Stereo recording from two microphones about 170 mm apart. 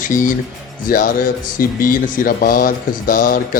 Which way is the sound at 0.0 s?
50° left (ahead or behind).